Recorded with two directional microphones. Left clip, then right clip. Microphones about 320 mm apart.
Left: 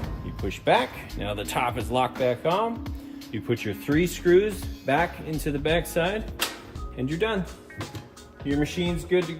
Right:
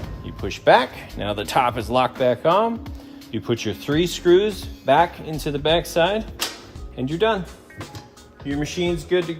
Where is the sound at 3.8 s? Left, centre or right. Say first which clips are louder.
Right 4 dB; centre.